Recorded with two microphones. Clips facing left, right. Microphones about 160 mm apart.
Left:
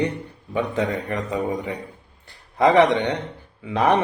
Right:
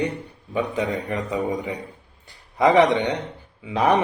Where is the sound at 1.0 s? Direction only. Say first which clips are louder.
Even; 10° right (ahead or behind).